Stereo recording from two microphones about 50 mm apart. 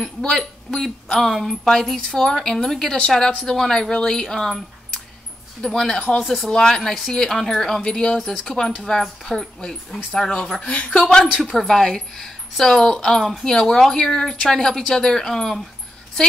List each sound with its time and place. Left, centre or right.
0.2 s speech: centre
10.6 s a woman's voice: left